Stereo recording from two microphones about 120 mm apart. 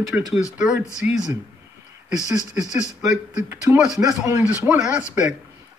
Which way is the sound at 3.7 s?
5° right (ahead or behind).